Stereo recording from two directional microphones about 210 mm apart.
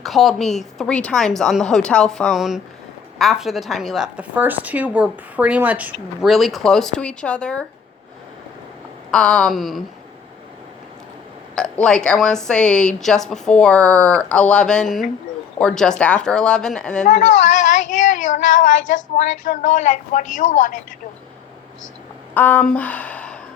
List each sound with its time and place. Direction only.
0.0 s speech: centre (ahead or behind)
9.1 s speech: 5° left (ahead or behind)
11.5 s speech: 5° left (ahead or behind)
17.1 s a woman's voice: 35° left (ahead or behind)
22.4 s speech: 10° left (ahead or behind)